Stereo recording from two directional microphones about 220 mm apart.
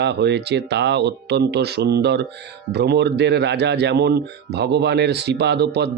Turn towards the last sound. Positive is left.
turn(degrees=-50)  # may be behind; listen again after turning